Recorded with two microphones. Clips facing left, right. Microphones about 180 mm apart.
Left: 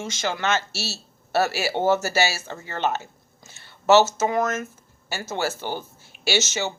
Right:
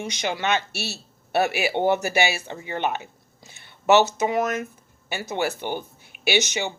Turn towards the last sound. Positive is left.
turn(degrees=-20)  # may be behind; listen again after turning